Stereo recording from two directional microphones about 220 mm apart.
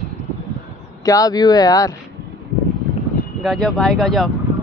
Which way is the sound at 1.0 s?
15° left (ahead or behind).